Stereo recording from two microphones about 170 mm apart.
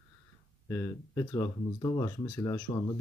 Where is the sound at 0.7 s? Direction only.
20° left (ahead or behind).